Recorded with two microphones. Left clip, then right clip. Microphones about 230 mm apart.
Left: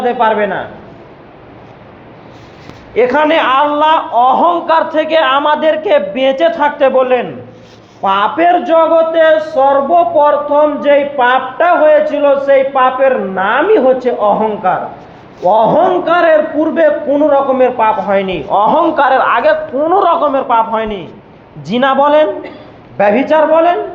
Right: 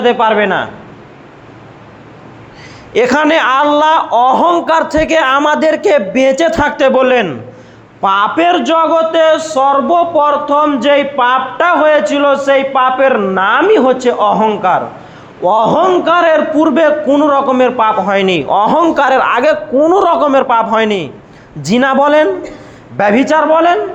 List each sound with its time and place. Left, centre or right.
0.0 s a man's voice: right
2.9 s a man's voice: right
8.0 s a man's voice: right